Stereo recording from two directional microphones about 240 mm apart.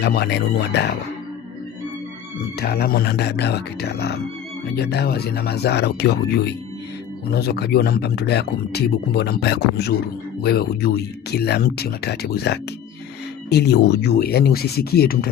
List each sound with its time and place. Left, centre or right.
0.0 s speech: left
2.6 s speech: left